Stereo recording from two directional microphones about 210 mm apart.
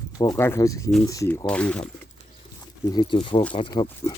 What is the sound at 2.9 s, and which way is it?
Speech, 20° left (ahead or behind).